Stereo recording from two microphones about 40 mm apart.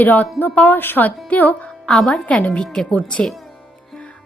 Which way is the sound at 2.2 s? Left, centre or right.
Left.